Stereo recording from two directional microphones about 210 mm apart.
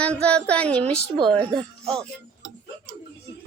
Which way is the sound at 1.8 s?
Centre (ahead or behind).